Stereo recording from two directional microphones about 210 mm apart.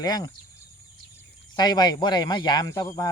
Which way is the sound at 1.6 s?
20° left (ahead or behind).